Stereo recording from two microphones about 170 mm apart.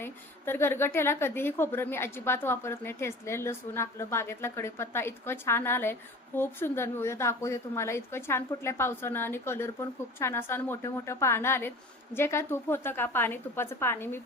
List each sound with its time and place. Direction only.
0.0 s a woman's voice: 15° left (ahead or behind)